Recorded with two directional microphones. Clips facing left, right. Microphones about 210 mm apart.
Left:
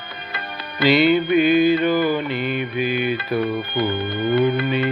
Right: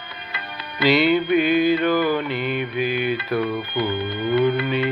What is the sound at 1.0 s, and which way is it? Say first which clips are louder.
Mantra: left 2 dB; 5° left (ahead or behind).